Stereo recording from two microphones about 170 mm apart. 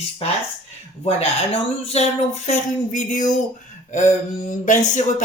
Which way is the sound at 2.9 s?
45° left (ahead or behind).